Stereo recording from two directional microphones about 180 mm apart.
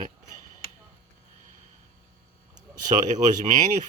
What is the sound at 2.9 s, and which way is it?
Speech, 40° right (ahead or behind).